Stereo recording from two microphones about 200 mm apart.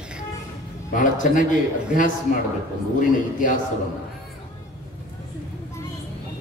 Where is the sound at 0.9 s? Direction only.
40° left (ahead or behind).